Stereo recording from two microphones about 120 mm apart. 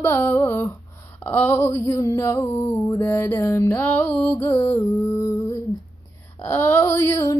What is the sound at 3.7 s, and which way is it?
Female singing, 15° left (ahead or behind).